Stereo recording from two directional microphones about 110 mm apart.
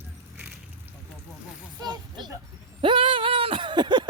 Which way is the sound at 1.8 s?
40° right (ahead or behind).